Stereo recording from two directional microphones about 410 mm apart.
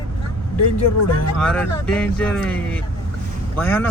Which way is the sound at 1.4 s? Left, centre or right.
Centre.